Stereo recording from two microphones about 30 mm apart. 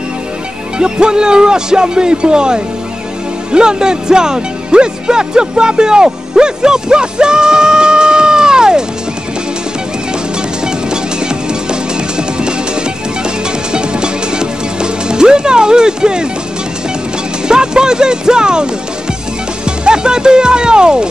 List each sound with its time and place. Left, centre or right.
0.7 s speech: right
10.9 s music: right
13.7 s music: right
17.5 s speech: right
19.8 s speech: right